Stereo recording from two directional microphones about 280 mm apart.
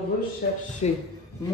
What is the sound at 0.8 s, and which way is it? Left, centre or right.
Speech, left.